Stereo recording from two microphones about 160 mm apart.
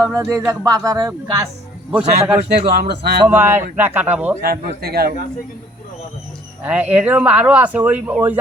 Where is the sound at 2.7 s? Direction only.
90° right.